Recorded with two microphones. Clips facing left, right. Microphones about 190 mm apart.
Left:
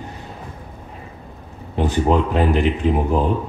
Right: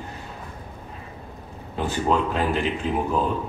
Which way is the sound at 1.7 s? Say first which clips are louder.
Left 5 dB; 20° left (ahead or behind).